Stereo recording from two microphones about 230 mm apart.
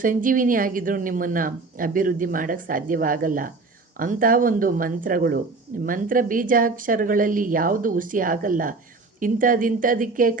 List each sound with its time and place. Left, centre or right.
0.0 s speech: right